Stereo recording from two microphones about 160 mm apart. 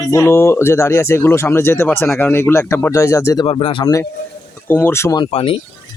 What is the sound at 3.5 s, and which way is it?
Speech, 35° left (ahead or behind).